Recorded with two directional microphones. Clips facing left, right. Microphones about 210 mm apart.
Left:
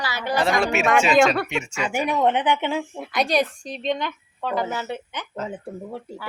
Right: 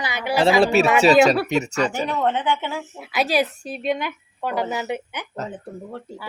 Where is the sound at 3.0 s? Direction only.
5° right (ahead or behind).